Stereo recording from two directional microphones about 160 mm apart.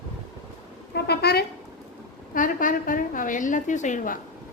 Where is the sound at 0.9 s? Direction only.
90° left.